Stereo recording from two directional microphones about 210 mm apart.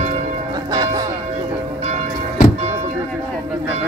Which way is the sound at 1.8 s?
30° right (ahead or behind).